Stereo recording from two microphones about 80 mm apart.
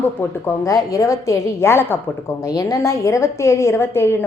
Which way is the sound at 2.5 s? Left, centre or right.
Left.